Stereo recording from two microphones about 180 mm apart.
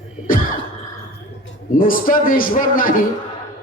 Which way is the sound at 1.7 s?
50° left (ahead or behind).